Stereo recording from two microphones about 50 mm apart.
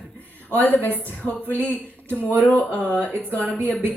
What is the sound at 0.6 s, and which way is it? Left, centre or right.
Speech, left.